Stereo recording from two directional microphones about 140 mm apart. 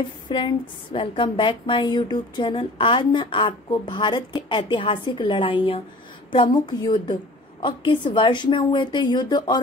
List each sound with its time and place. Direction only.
0.3 s a woman's voice: 35° left (ahead or behind)